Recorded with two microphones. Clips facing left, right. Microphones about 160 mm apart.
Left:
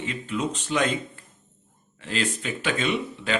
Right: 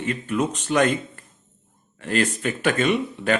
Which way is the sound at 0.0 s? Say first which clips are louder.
Right 4 dB; 55° right (ahead or behind).